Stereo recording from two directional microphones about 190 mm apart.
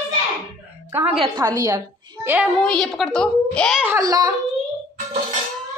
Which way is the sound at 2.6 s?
Centre (ahead or behind).